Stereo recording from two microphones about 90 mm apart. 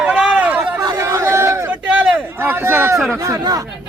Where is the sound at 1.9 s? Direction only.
15° right (ahead or behind).